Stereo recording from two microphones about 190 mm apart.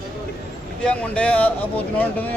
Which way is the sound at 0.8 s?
5° left (ahead or behind).